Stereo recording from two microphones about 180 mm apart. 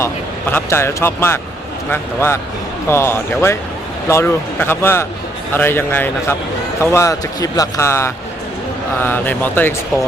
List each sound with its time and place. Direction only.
0.5 s speech: 15° left (ahead or behind)